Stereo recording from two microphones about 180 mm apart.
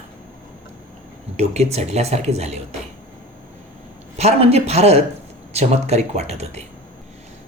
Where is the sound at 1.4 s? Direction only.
35° right (ahead or behind).